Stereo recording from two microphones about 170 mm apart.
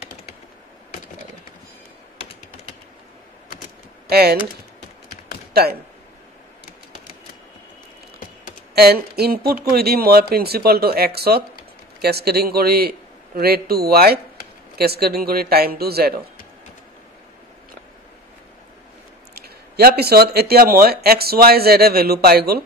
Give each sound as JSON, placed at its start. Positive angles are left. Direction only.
{"t": 4.1, "sound": "speech", "side_deg": -65}
{"t": 5.5, "sound": "speech", "side_deg": -65}
{"t": 8.7, "sound": "speech", "side_deg": -65}
{"t": 19.3, "sound": "speech", "side_deg": -65}